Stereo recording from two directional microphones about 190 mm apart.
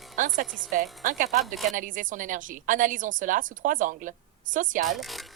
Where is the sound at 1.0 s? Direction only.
40° right (ahead or behind).